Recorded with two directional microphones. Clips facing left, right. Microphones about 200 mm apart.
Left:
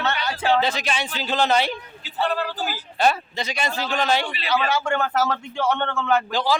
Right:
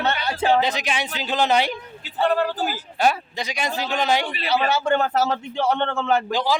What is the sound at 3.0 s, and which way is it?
A man's voice, 15° right (ahead or behind).